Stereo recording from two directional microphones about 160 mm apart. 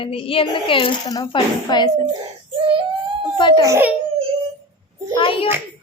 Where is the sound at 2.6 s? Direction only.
35° right (ahead or behind).